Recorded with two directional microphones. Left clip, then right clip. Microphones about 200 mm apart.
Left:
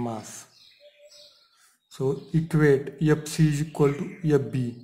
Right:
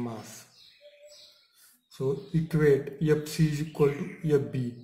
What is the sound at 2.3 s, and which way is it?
Speech, 40° left (ahead or behind).